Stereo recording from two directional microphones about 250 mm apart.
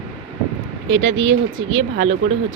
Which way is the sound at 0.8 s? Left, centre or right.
Right.